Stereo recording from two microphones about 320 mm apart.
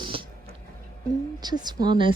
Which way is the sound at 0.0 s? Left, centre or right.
Centre.